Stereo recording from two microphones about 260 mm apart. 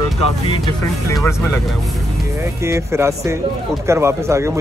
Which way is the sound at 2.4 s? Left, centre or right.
Centre.